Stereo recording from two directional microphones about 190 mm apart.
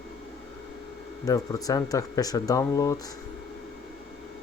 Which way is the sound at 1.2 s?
20° left (ahead or behind).